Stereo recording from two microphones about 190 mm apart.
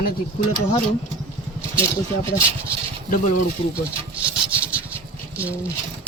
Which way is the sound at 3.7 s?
5° right (ahead or behind).